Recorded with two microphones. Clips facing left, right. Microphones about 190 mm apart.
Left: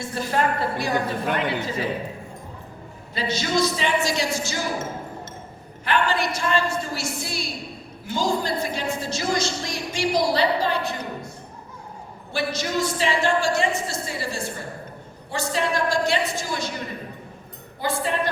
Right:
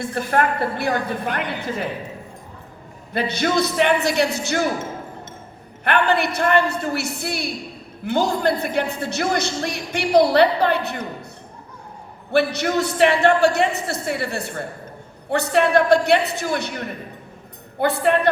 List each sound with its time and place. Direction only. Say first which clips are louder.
0.0 s a man's voice: right 3 dB; 55° right (ahead or behind)
3.1 s a man's voice: right 4 dB; 60° right (ahead or behind)
5.8 s a man's voice: right 4 dB; 60° right (ahead or behind)
12.3 s a man's voice: right 7 dB; 60° right (ahead or behind)